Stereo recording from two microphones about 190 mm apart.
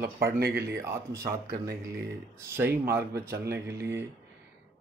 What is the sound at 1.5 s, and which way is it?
Speech, 50° right (ahead or behind).